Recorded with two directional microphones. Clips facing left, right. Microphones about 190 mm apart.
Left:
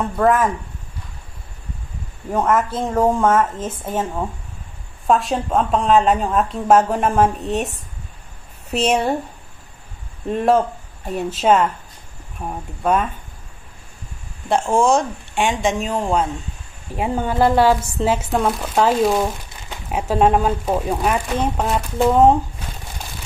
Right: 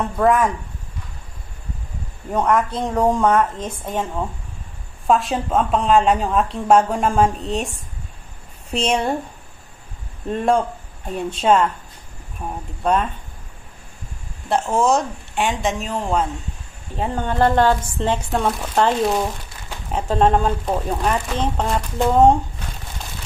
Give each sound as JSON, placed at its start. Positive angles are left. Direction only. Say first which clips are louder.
{"t": 0.2, "sound": "a woman's voice", "louder": "even", "side_deg": 0}
{"t": 2.3, "sound": "a woman's voice", "louder": "even", "side_deg": 5}
{"t": 10.2, "sound": "a woman's voice", "louder": "left 2 dB", "side_deg": 5}
{"t": 14.8, "sound": "a woman's voice", "louder": "left 1 dB", "side_deg": -5}